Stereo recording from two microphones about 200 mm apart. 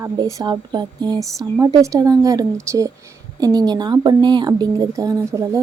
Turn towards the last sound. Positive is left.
turn(degrees=-15)  # may be behind; listen again after turning